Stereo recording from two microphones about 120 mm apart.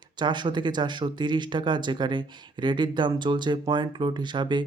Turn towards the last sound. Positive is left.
turn(degrees=-40)  # may be behind; listen again after turning